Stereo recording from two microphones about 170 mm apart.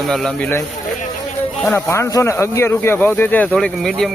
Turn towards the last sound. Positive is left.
turn(degrees=5)  # may be behind; listen again after turning